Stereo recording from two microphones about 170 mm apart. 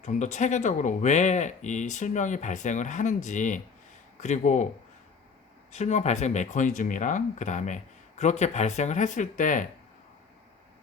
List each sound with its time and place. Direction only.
0.0 s speech: 45° left (ahead or behind)
5.7 s speech: 40° left (ahead or behind)